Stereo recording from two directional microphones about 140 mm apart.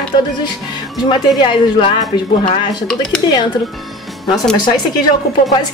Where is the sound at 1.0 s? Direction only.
35° left (ahead or behind).